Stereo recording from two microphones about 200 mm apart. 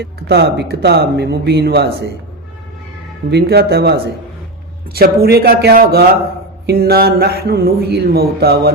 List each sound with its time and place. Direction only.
0.0 s speech: 55° right (ahead or behind)
3.2 s speech: 55° right (ahead or behind)